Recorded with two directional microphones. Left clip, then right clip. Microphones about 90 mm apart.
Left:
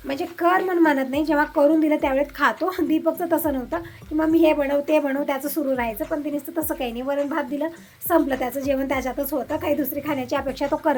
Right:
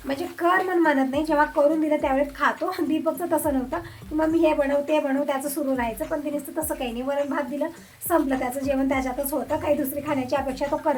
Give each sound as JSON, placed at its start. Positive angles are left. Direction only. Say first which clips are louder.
{"t": 0.1, "sound": "speech", "louder": "left 2 dB", "side_deg": 25}
{"t": 0.9, "sound": "a woman's voice", "louder": "left 1 dB", "side_deg": 40}
{"t": 1.2, "sound": "speech", "louder": "left 1 dB", "side_deg": 30}
{"t": 1.5, "sound": "a woman's voice", "louder": "left 2 dB", "side_deg": 45}